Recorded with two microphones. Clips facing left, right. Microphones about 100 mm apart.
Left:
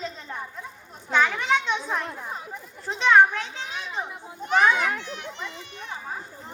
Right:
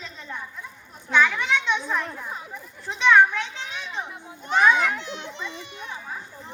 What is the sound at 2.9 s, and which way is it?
Children playing, 35° left (ahead or behind).